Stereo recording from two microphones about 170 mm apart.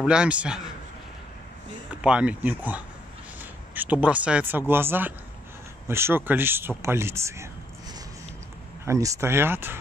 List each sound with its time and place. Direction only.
0.0 s a man's voice: 5° right (ahead or behind)
2.0 s speech: 5° right (ahead or behind)
8.8 s speech: 20° right (ahead or behind)